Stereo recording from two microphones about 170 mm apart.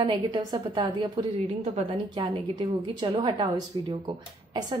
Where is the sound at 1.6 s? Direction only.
40° right (ahead or behind).